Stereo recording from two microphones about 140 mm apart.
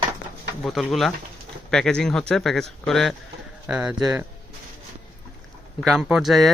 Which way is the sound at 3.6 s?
10° right (ahead or behind).